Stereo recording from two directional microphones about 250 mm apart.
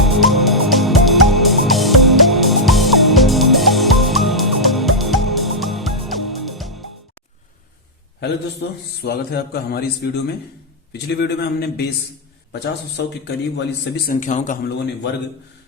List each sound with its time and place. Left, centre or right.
0.0 s music: centre
8.6 s a man's voice: left
12.5 s speech: left